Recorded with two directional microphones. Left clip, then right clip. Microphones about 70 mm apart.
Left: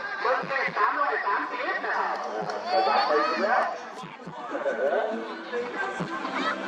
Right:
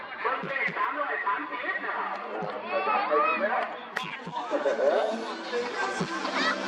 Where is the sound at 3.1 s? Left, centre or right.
Centre.